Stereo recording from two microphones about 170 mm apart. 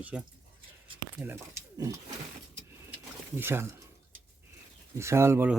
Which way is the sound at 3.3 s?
15° right (ahead or behind).